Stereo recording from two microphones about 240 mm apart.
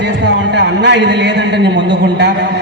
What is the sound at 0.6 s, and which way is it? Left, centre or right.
Speech, right.